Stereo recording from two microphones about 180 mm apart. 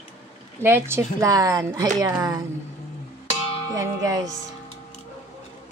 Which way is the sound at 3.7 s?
20° right (ahead or behind).